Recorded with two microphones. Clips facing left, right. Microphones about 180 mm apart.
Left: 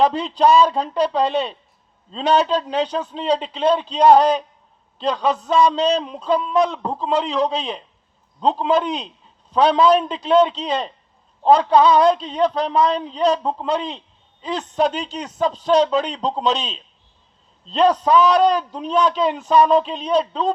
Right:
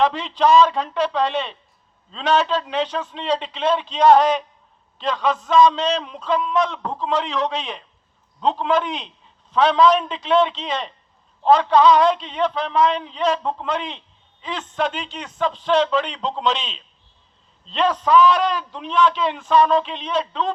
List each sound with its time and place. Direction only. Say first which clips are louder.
0.0 s a man's voice: left 2 dB; 35° left (ahead or behind)